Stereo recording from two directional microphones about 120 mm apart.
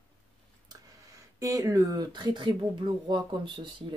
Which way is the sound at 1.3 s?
25° right (ahead or behind).